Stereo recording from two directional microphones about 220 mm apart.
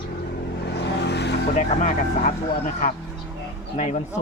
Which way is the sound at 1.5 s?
35° left (ahead or behind).